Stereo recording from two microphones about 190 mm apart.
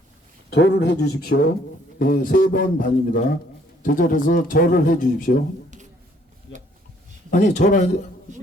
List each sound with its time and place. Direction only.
0.5 s speech: 65° left (ahead or behind); by 5.4 s 50° left (ahead or behind)
6.5 s a sound: 80° left
7.3 s speech: 40° left (ahead or behind)